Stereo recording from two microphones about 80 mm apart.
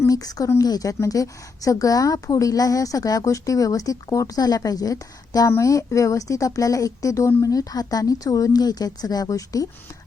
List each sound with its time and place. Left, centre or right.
0.1 s a woman's voice: left
5.5 s a woman's voice: left